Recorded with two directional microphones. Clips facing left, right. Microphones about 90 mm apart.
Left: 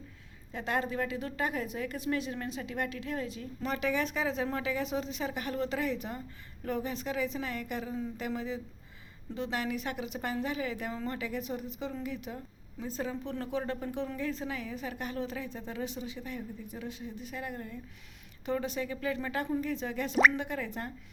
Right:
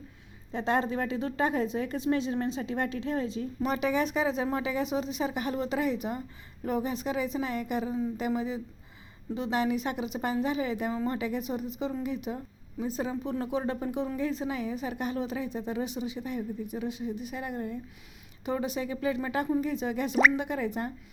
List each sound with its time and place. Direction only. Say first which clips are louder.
0.5 s a woman's voice: right 5 dB; 25° right (ahead or behind)
3.6 s a woman's voice: right 3 dB; 20° right (ahead or behind)